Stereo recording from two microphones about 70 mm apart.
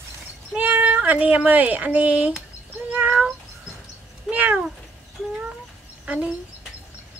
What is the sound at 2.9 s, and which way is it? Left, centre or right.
Cat, right.